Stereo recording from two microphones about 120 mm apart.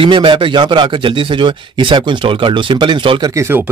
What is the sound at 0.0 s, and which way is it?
Speech, 45° right (ahead or behind).